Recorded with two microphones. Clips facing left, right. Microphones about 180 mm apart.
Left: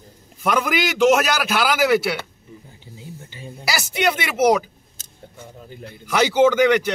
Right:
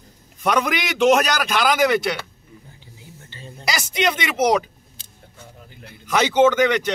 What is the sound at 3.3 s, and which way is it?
Speech, 10° left (ahead or behind).